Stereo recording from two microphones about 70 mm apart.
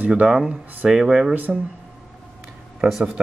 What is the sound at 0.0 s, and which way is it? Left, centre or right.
Speech, centre.